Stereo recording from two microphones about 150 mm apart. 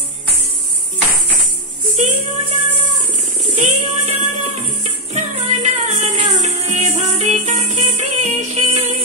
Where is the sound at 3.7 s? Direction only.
55° right (ahead or behind).